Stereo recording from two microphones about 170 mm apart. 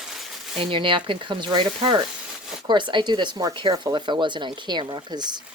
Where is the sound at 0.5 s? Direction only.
30° right (ahead or behind).